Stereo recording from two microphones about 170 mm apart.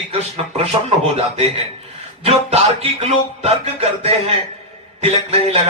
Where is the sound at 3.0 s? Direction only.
35° right (ahead or behind).